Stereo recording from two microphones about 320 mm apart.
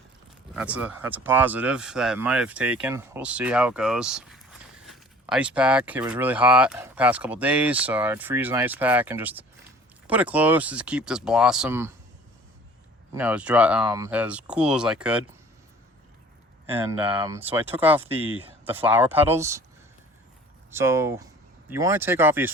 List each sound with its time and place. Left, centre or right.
0.5 s speech: centre
13.1 s speech: centre
16.7 s speech: centre
18.1 s speech: centre
18.6 s speech: centre
20.7 s speech: centre